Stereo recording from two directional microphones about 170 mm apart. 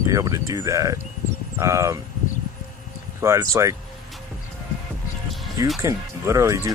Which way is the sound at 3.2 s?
15° right (ahead or behind).